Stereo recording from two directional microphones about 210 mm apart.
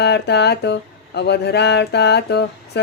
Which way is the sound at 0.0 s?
55° left (ahead or behind).